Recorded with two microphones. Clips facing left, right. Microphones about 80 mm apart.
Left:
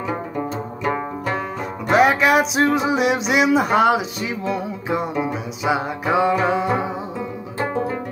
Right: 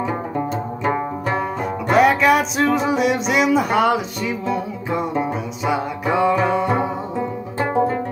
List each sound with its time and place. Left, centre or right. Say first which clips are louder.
1.9 s music: right 1 dB; centre
7.5 s music: right 4 dB; centre